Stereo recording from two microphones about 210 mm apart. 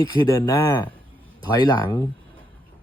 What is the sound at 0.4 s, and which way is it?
Speech, 15° left (ahead or behind).